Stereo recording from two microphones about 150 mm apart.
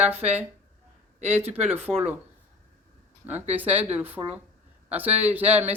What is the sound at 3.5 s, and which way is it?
Speech, 10° right (ahead or behind).